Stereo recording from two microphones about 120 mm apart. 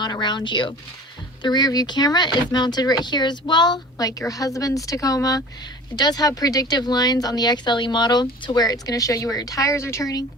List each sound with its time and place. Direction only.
0.0 s speech: 40° left (ahead or behind)